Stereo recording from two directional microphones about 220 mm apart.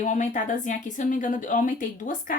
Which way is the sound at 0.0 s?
35° left (ahead or behind).